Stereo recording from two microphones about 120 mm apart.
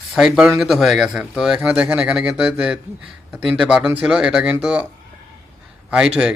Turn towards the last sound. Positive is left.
turn(degrees=-5)  # may be behind; listen again after turning